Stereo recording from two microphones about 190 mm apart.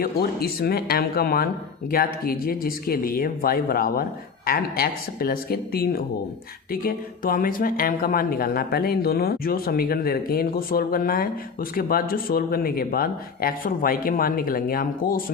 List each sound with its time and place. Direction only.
0.0 s speech: 55° left (ahead or behind)